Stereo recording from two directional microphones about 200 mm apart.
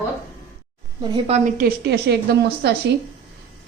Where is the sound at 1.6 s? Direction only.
55° right (ahead or behind).